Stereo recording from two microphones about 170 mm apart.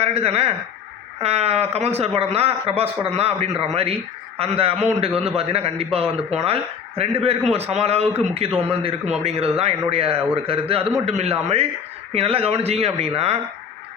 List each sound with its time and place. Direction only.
0.0 s a man's voice: 35° right (ahead or behind)